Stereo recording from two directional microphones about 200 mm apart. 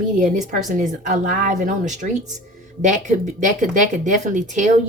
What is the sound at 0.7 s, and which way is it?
Speech, 40° right (ahead or behind).